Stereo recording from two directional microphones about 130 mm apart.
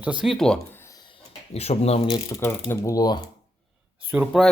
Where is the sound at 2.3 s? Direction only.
30° left (ahead or behind).